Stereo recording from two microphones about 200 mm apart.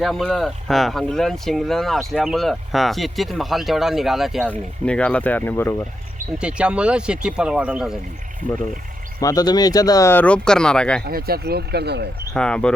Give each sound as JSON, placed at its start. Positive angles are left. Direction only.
{"t": 0.0, "sound": "speech", "side_deg": 0}
{"t": 6.4, "sound": "speech", "side_deg": -5}
{"t": 9.2, "sound": "speech", "side_deg": 20}
{"t": 11.0, "sound": "speech", "side_deg": -50}
{"t": 12.3, "sound": "speech", "side_deg": 5}